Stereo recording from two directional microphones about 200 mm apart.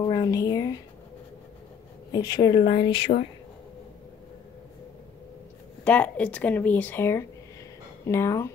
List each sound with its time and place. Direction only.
0.0 s speech: 20° left (ahead or behind)
2.1 s speech: 20° left (ahead or behind)
5.9 s speech: 5° left (ahead or behind)